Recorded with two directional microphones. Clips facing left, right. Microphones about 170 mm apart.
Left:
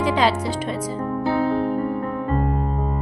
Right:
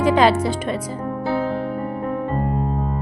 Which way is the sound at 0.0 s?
50° right (ahead or behind).